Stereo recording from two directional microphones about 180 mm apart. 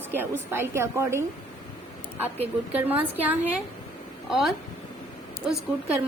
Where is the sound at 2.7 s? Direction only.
10° right (ahead or behind).